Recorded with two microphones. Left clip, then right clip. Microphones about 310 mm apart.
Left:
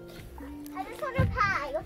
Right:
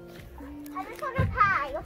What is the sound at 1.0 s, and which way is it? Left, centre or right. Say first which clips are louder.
Children playing: right 3 dB; centre.